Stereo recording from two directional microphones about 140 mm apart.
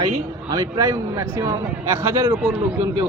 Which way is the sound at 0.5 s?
25° right (ahead or behind).